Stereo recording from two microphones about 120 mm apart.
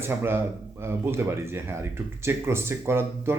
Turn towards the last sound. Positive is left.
turn(degrees=-20)  # may be behind; listen again after turning